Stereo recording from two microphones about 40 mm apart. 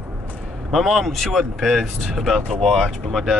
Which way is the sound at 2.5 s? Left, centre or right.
Centre.